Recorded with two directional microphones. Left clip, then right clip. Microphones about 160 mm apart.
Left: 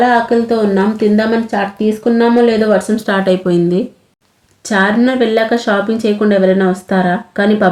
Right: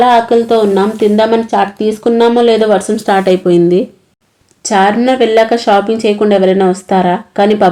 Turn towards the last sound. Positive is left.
turn(degrees=-30)  # may be behind; listen again after turning